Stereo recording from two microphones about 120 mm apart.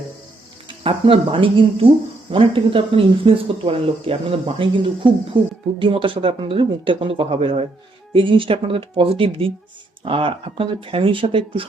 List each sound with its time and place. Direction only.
0.7 s speech: 45° right (ahead or behind)
8.1 s speech: 45° right (ahead or behind)